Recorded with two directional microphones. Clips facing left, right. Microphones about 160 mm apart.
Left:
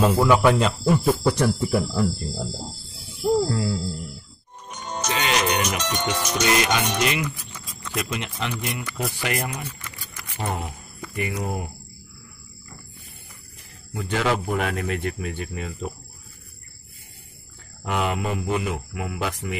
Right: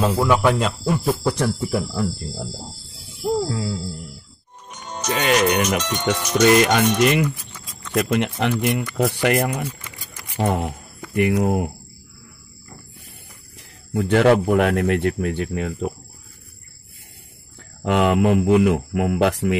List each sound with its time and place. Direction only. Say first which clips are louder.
0.0 s speech: even; centre (ahead or behind)
3.4 s speech: left 1 dB; centre (ahead or behind)
5.1 s speech: right 5 dB; 45° right (ahead or behind)
7.5 s a sound: left 1 dB; centre (ahead or behind)
7.9 s speech: right 9 dB; 55° right (ahead or behind)
13.9 s speech: right 9 dB; 60° right (ahead or behind)
17.8 s speech: right 8 dB; 65° right (ahead or behind)